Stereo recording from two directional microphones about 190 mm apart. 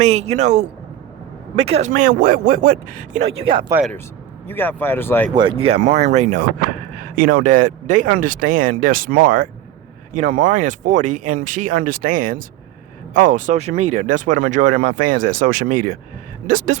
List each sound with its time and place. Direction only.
0.0 s speech: 35° right (ahead or behind)
3.5 s speech: 25° right (ahead or behind)
4.4 s speech: 10° left (ahead or behind)
5.3 s speech: 25° right (ahead or behind); by 16.7 s 45° right (ahead or behind)